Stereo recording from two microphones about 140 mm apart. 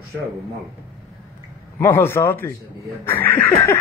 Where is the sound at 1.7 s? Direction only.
15° left (ahead or behind).